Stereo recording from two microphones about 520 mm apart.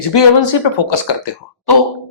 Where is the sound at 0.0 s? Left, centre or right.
Left.